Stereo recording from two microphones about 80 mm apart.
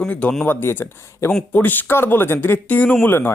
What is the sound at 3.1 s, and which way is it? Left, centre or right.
Speech, left.